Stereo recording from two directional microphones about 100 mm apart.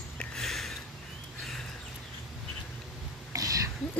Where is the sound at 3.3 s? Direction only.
35° right (ahead or behind).